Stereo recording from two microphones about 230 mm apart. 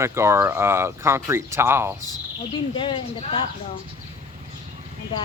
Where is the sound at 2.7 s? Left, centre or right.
Left.